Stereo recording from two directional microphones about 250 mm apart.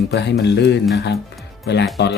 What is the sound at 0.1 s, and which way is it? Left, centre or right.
Speech, left.